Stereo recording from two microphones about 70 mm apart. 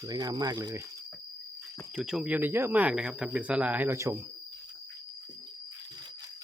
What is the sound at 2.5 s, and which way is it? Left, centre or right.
Speech, right.